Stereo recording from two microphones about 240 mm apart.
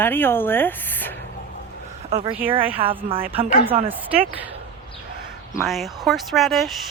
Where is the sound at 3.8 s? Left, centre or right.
Centre.